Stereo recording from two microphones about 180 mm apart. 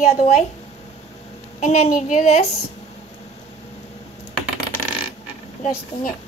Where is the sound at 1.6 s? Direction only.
40° left (ahead or behind).